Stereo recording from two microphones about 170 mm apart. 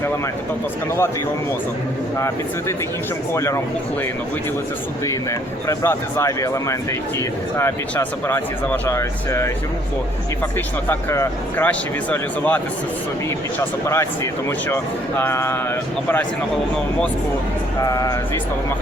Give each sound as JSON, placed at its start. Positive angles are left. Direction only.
{"t": 2.1, "sound": "speech", "side_deg": 15}
{"t": 5.6, "sound": "speech", "side_deg": 15}
{"t": 10.8, "sound": "speech", "side_deg": 15}
{"t": 17.7, "sound": "speech", "side_deg": 20}